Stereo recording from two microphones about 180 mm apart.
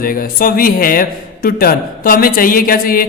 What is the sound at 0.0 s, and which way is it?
A man's voice, 55° left (ahead or behind).